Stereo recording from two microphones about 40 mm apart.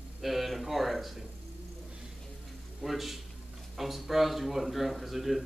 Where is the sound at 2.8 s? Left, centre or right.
Centre.